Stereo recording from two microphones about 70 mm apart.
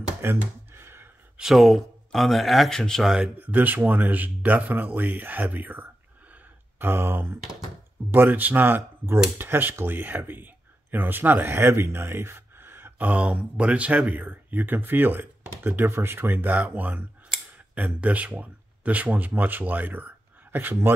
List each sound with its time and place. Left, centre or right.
0.2 s a sound: right
1.4 s speech: centre
3.0 s speech: centre
3.3 s speech: right
6.3 s a sound: right
8.1 s speech: right